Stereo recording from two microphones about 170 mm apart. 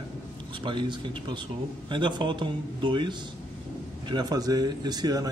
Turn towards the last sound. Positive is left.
turn(degrees=-25)  # may be behind; listen again after turning